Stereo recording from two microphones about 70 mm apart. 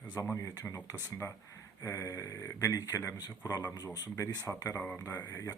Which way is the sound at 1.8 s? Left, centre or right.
Left.